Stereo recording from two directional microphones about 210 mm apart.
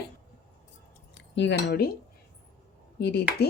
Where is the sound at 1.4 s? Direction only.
55° left (ahead or behind).